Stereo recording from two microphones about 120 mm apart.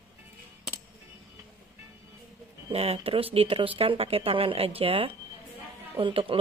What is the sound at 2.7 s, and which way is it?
A woman's voice, 55° right (ahead or behind).